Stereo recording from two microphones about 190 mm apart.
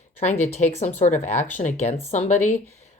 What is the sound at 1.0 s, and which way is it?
Speech, 40° left (ahead or behind).